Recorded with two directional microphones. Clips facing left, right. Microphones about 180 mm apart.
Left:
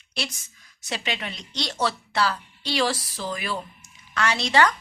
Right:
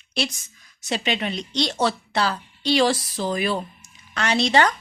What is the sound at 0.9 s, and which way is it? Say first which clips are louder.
Speech: right 6 dB; 25° right (ahead or behind).